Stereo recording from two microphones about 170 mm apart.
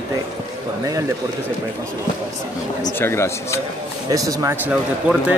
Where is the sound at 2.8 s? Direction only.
15° left (ahead or behind).